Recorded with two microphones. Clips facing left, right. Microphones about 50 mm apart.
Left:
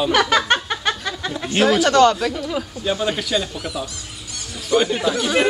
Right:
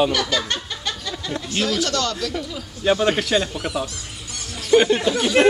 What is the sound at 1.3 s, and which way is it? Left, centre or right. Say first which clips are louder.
Speech: left 6 dB; left.